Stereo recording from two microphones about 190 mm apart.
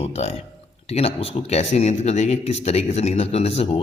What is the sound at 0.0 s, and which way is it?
A man's voice, 35° left (ahead or behind).